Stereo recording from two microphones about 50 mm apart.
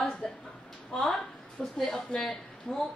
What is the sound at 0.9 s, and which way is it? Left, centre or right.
A woman's voice, centre.